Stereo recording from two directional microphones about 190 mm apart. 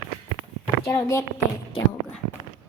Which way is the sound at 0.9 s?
15° left (ahead or behind).